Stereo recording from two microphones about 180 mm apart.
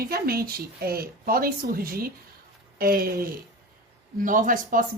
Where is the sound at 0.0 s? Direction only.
55° right (ahead or behind).